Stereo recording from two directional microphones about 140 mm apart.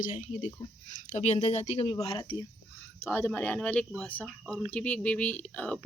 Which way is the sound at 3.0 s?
15° left (ahead or behind).